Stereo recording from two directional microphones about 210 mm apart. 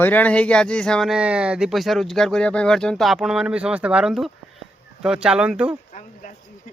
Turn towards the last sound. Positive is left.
turn(degrees=35)  # may be behind; listen again after turning